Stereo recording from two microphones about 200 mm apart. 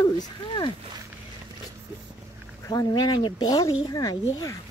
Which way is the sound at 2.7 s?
20° left (ahead or behind).